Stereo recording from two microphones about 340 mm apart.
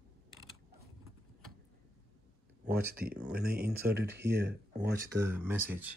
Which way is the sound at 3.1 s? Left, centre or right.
Centre.